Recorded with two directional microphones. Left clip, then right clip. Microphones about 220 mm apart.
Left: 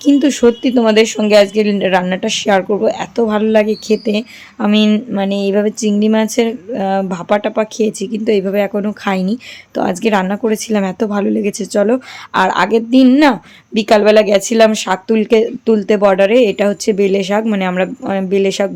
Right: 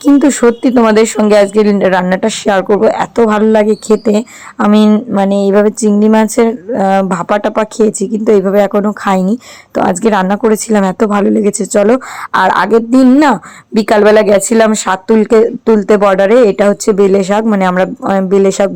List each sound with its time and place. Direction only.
0.0 s speech: 15° right (ahead or behind)